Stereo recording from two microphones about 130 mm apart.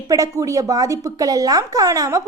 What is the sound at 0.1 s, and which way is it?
Speech, 25° right (ahead or behind).